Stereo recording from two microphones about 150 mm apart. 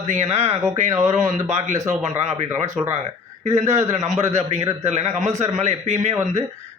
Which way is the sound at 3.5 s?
20° right (ahead or behind).